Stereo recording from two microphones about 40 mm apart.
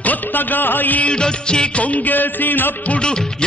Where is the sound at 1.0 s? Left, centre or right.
Left.